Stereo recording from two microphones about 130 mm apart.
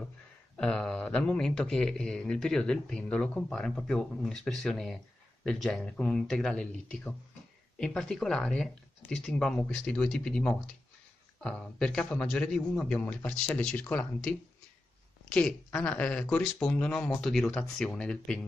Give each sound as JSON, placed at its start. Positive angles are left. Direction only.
{"t": 0.6, "sound": "speech", "side_deg": 5}
{"t": 15.3, "sound": "speech", "side_deg": 5}